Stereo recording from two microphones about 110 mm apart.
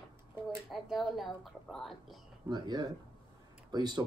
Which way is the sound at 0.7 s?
Centre (ahead or behind).